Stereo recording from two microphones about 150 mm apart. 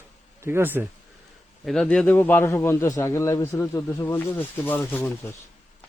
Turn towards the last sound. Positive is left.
turn(degrees=15)  # may be behind; listen again after turning